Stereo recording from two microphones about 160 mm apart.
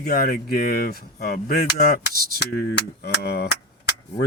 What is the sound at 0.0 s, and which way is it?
Speech, 65° left (ahead or behind).